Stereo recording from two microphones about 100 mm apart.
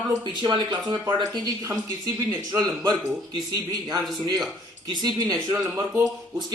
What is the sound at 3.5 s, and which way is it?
Speech, 40° right (ahead or behind).